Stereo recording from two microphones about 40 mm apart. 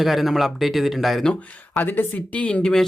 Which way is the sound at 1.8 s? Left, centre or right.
Left.